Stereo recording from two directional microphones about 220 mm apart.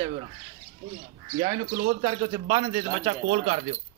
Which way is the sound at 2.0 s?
20° right (ahead or behind).